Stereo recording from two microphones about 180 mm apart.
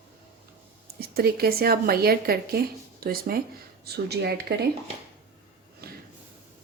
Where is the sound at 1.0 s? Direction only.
60° right (ahead or behind).